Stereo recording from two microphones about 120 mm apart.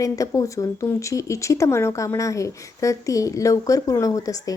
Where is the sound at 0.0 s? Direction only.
30° left (ahead or behind).